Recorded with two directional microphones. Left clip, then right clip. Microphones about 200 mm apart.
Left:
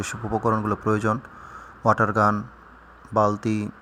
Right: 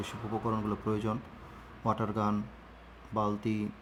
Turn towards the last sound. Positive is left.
turn(degrees=25)  # may be behind; listen again after turning